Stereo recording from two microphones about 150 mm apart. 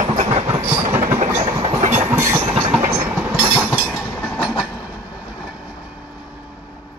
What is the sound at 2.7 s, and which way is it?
Train, 5° right (ahead or behind).